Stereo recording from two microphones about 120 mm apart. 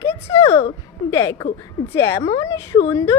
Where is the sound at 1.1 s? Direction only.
25° left (ahead or behind).